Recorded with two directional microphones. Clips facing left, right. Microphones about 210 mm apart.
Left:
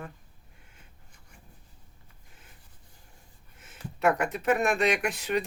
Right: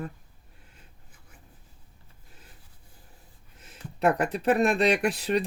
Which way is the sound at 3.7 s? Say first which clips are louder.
Right 1 dB; 35° right (ahead or behind).